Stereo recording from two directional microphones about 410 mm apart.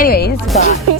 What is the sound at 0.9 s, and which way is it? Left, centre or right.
Speech, right.